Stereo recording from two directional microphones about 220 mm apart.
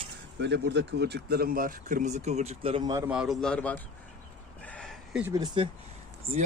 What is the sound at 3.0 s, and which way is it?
Speech, 5° right (ahead or behind).